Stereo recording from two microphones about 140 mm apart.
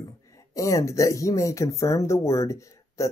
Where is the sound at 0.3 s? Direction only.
25° left (ahead or behind).